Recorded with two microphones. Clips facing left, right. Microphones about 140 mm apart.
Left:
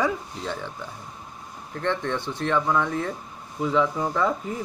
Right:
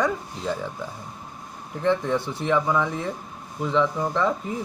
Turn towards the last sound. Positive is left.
turn(degrees=0)  # may be behind; listen again after turning